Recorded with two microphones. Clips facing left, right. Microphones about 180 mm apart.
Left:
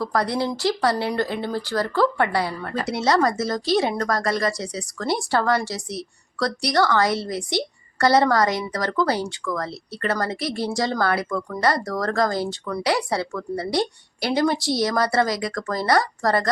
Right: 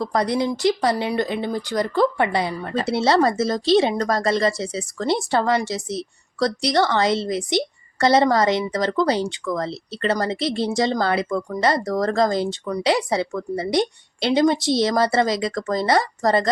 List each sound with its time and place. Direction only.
0.0 s speech: 20° right (ahead or behind)